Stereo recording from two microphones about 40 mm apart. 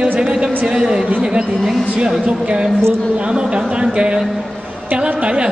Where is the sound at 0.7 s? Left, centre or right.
Centre.